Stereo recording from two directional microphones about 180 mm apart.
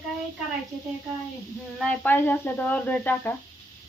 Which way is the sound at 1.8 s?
10° left (ahead or behind).